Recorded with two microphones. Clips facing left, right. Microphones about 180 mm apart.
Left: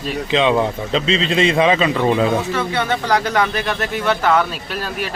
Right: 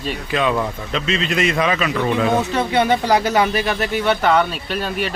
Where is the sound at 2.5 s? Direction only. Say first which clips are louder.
Right 3 dB; 15° right (ahead or behind).